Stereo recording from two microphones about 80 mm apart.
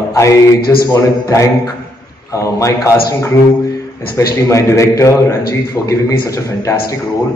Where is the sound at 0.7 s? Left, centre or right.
Left.